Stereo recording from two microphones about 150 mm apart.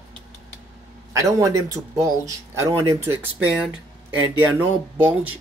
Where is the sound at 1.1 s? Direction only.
20° right (ahead or behind).